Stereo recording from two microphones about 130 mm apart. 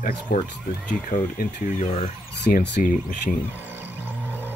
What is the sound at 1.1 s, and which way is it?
Speech, 80° left.